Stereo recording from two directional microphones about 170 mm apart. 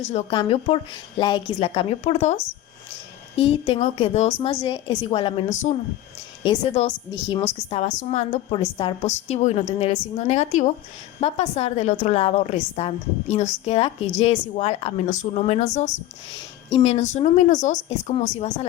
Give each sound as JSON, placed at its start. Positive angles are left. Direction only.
{"t": 0.1, "sound": "a woman's voice", "side_deg": 40}
{"t": 5.5, "sound": "speech", "side_deg": 45}
{"t": 6.8, "sound": "a woman's voice", "side_deg": 40}
{"t": 9.0, "sound": "a woman's voice", "side_deg": 40}